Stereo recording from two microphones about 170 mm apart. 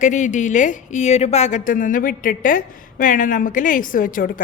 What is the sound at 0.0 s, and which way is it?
Speech, 45° left (ahead or behind).